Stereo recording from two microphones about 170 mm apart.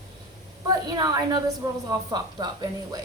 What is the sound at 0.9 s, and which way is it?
A woman's voice, 25° right (ahead or behind).